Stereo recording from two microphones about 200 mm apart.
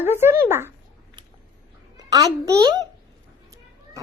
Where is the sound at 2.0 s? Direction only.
20° right (ahead or behind).